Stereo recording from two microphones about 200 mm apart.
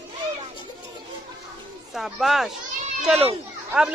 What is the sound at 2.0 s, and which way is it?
Speech, centre (ahead or behind).